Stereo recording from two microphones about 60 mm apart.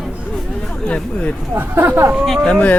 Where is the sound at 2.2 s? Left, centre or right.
Centre.